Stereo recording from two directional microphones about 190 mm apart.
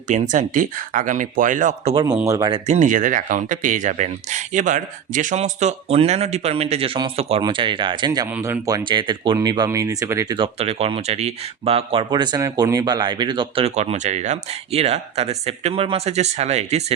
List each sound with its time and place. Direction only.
0.1 s speech: 40° right (ahead or behind)
2.2 s speech: 20° right (ahead or behind)
2.5 s speech: 40° right (ahead or behind)